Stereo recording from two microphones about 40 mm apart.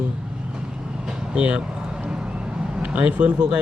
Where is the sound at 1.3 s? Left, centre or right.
Right.